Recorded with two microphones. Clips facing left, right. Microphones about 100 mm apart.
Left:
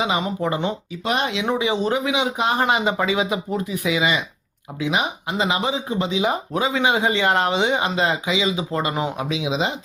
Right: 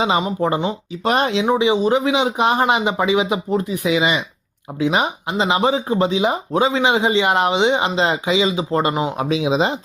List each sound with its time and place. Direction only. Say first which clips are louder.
0.0 s speech: right 4 dB; 30° right (ahead or behind)
1.0 s speech: right 5 dB; 40° right (ahead or behind)
1.5 s speech: right 5 dB; 20° right (ahead or behind)
2.0 s speech: right 4 dB; 30° right (ahead or behind)